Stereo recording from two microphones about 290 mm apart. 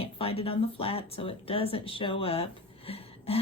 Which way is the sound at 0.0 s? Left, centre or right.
Centre.